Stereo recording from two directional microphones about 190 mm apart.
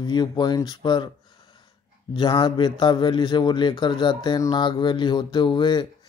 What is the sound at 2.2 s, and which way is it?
Speech, 25° left (ahead or behind).